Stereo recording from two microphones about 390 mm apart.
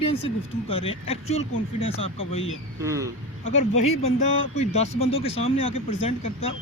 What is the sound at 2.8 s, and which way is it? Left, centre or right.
Speech, centre.